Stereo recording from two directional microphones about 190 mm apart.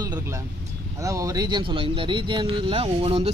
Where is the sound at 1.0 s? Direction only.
15° right (ahead or behind).